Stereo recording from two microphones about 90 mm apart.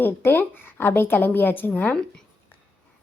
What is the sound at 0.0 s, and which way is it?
A woman's voice, 25° left (ahead or behind).